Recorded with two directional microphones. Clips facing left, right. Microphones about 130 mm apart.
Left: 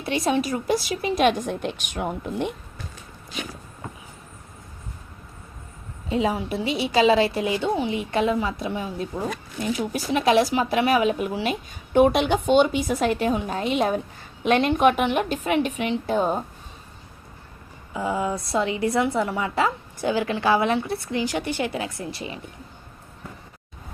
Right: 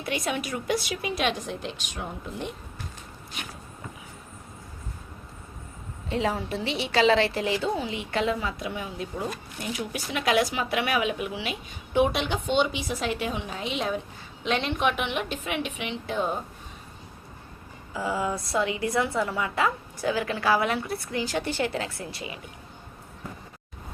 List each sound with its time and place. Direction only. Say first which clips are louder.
0.0 s speech: left 6 dB; 30° left (ahead or behind); by 2.5 s 60° left (ahead or behind)
6.1 s a woman's voice: left 4 dB; 15° left (ahead or behind); by 16.4 s 40° left (ahead or behind)
17.9 s a woman's voice: left 3 dB; 25° left (ahead or behind)